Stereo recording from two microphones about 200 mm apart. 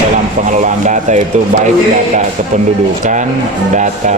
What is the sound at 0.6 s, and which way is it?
Speech, 35° right (ahead or behind).